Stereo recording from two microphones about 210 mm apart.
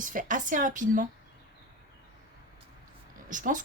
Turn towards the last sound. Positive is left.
turn(degrees=-40)  # may be behind; listen again after turning